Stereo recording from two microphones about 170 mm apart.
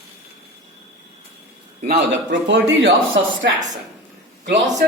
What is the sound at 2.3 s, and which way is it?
Speech, 90° right.